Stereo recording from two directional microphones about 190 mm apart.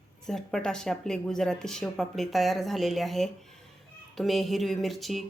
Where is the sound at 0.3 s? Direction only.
Centre (ahead or behind).